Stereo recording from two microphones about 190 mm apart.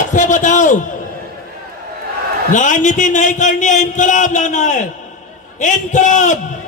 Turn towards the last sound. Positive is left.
turn(degrees=40)  # may be behind; listen again after turning